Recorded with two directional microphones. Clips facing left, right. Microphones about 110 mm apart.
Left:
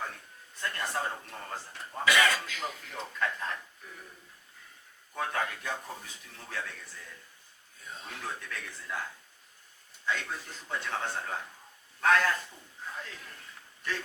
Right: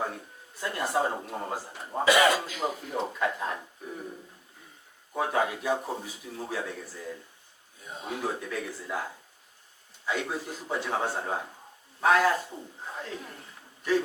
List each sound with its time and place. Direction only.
0.6 s a man's voice: 15° right (ahead or behind)
3.6 s a sound: 30° right (ahead or behind)
5.1 s a man's voice: 15° right (ahead or behind)
5.7 s speech: 25° right (ahead or behind)
6.5 s a man's voice: 15° right (ahead or behind)
11.2 s speech: 25° right (ahead or behind)
12.0 s a man's voice: 10° right (ahead or behind)
12.5 s a sound: 30° right (ahead or behind)